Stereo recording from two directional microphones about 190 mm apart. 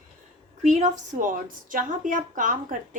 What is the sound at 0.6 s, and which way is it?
A woman's voice, 40° right (ahead or behind).